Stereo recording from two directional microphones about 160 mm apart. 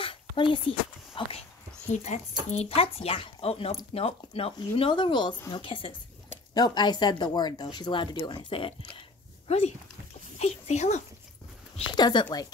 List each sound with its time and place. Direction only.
0.0 s a sound: 35° left (ahead or behind)
1.9 s speech: 45° left (ahead or behind)
11.9 s speech: 30° left (ahead or behind)